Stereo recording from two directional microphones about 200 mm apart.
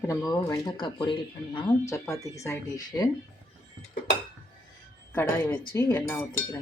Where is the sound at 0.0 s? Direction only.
15° left (ahead or behind).